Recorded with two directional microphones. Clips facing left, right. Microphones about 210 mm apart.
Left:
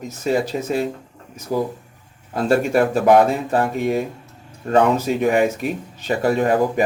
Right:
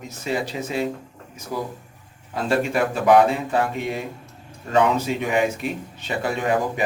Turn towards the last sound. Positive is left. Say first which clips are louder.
# left 5 dB
turn(degrees=40)  # may be behind; listen again after turning